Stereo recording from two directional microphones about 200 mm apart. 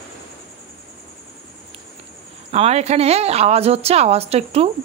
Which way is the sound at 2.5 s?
30° right (ahead or behind).